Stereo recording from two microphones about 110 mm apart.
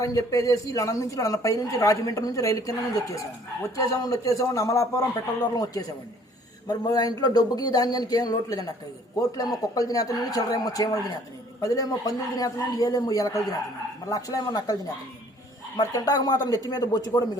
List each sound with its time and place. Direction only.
0.0 s speech: 30° left (ahead or behind)